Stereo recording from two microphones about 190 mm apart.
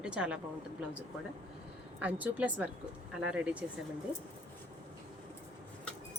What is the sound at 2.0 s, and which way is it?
A woman's voice, 10° right (ahead or behind).